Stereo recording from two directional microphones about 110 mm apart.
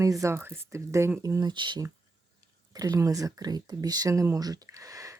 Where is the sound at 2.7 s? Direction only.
30° right (ahead or behind).